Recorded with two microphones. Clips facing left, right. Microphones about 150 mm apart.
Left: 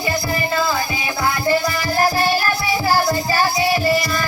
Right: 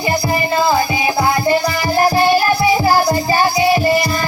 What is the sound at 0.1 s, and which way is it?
Music, 20° right (ahead or behind).